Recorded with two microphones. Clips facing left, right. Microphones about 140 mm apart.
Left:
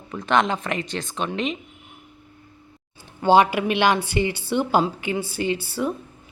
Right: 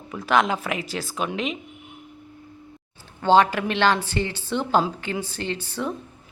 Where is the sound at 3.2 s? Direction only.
10° left (ahead or behind).